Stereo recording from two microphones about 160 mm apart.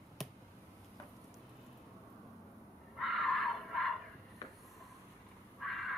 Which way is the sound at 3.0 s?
Centre (ahead or behind).